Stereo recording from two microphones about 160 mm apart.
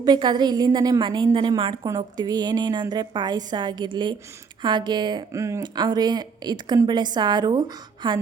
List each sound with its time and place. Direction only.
0.0 s speech: 25° right (ahead or behind)